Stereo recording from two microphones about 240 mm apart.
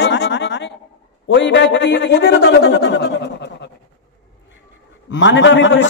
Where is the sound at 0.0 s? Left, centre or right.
Left.